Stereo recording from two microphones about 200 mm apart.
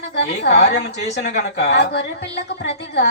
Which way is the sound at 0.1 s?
55° left (ahead or behind).